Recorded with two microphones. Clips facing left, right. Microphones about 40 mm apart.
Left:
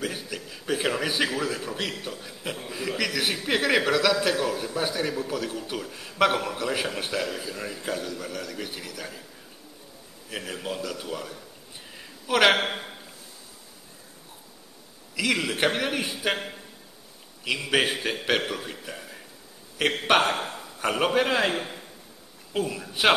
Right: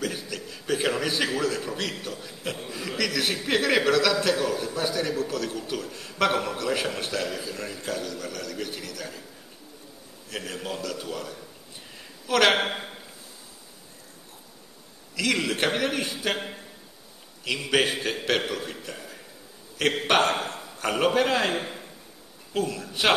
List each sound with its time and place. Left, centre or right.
0.0 s a sound: centre
1.6 s a man's voice: centre
10.3 s a man's voice: centre
11.9 s a sound: centre
12.5 s a man's voice: centre
15.1 s a man's voice: centre
17.5 s a man's voice: centre
22.5 s a man's voice: centre